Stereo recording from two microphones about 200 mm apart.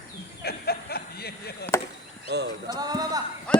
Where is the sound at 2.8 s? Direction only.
20° right (ahead or behind).